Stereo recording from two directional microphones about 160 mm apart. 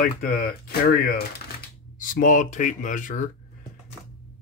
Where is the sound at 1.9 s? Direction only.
55° left (ahead or behind).